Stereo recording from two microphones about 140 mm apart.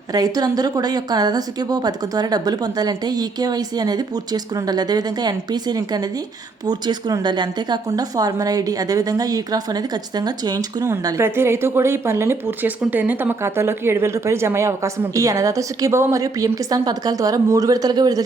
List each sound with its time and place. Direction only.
0.1 s a woman's voice: 25° right (ahead or behind)